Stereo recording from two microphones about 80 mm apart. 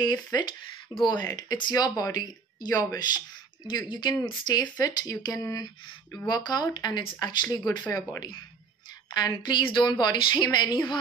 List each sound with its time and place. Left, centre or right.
0.0 s speech: left
3.6 s speech: left
6.1 s speech: left
7.9 s speech: left
9.1 s a woman's voice: left